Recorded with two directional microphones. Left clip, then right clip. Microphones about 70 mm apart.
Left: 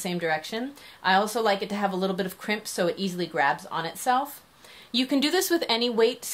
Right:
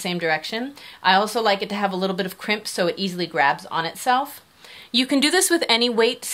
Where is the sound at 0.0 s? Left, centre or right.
Right.